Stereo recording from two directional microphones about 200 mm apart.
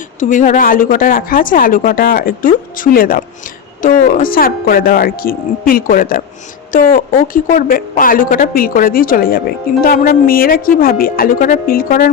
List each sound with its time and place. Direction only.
0.2 s a woman's voice: 40° left (ahead or behind)